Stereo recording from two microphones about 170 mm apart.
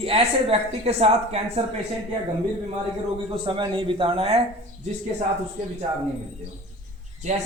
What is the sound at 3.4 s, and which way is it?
Speech, 30° right (ahead or behind).